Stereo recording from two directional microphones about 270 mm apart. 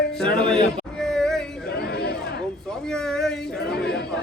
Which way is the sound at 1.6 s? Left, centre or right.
Left.